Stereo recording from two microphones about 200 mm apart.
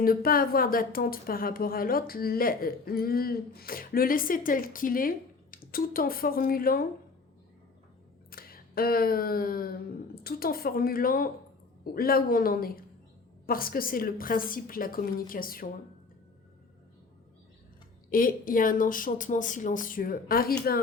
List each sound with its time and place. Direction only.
0.0 s speech: 45° left (ahead or behind)
8.3 s a sound: 45° left (ahead or behind)
10.2 s speech: 50° left (ahead or behind)
18.1 s speech: 45° left (ahead or behind)